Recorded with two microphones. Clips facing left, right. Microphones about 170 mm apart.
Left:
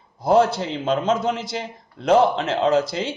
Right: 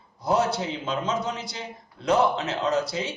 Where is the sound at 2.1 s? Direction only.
60° left (ahead or behind); by 3.0 s 90° left.